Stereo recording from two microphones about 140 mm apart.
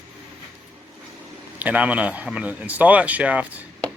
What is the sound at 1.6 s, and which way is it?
A man's voice, 10° right (ahead or behind).